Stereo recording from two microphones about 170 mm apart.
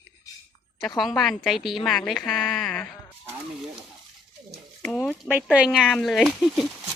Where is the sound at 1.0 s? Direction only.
Centre (ahead or behind).